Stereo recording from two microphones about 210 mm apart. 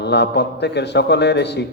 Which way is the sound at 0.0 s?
55° left (ahead or behind).